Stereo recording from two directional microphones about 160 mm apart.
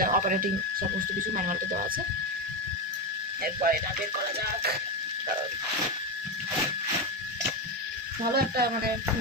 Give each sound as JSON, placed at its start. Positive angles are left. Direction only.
{"t": 0.0, "sound": "speech", "side_deg": -60}
{"t": 3.6, "sound": "speech", "side_deg": -65}
{"t": 8.4, "sound": "speech", "side_deg": -75}